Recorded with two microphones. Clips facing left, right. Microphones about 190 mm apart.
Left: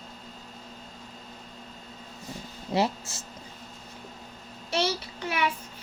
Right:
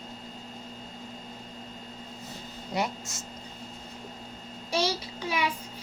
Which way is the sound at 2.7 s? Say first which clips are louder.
Left 5 dB; 30° left (ahead or behind).